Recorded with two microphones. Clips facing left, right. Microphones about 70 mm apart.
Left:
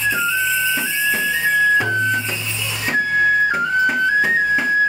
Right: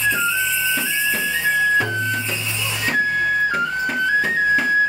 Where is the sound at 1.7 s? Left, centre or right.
Centre.